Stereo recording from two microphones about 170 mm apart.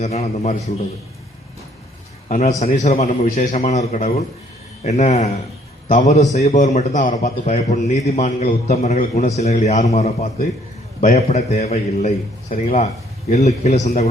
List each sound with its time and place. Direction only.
0.0 s a man's voice: 40° left (ahead or behind)
2.3 s a man's voice: 40° left (ahead or behind)